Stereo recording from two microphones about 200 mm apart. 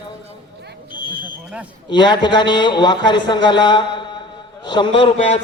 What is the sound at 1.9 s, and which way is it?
A man's voice, 20° left (ahead or behind).